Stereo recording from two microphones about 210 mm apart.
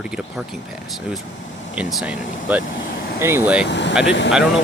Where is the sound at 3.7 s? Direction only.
55° left (ahead or behind).